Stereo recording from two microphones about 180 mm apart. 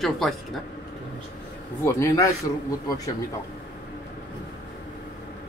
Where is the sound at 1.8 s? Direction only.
15° left (ahead or behind).